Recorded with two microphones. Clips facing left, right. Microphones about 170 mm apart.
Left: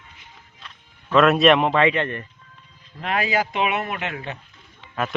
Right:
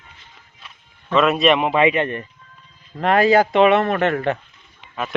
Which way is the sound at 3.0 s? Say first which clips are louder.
Right 9 dB; 50° right (ahead or behind).